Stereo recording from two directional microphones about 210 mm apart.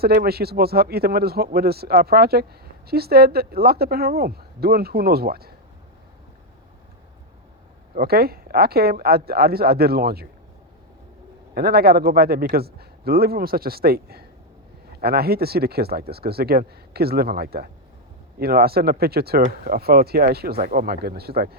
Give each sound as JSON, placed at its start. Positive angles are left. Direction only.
{"t": 0.0, "sound": "speech", "side_deg": -45}
{"t": 7.9, "sound": "speech", "side_deg": -45}
{"t": 11.5, "sound": "speech", "side_deg": -45}